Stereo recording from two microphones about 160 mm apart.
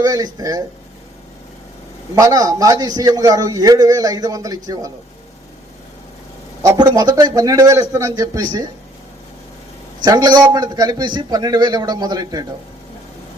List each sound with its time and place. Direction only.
0.0 s a man's voice: 20° right (ahead or behind)
2.1 s a man's voice: 20° right (ahead or behind)
6.7 s a man's voice: 25° right (ahead or behind)
10.0 s a man's voice: 25° right (ahead or behind)